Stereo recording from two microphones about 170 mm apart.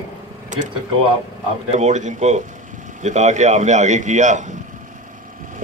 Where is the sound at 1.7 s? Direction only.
45° right (ahead or behind).